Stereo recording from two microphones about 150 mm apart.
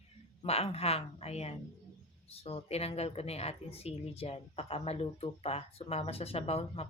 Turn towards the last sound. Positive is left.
turn(degrees=40)  # may be behind; listen again after turning